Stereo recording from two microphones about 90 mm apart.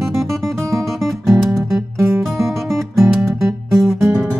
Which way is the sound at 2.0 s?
30° right (ahead or behind).